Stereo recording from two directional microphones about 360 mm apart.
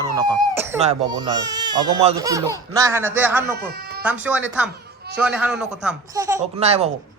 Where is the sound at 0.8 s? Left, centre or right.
Centre.